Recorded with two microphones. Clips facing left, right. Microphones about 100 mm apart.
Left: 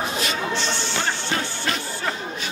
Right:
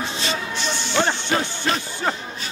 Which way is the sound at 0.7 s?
15° right (ahead or behind).